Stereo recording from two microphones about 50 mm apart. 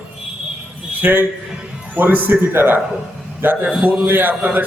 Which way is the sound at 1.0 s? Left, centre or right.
Right.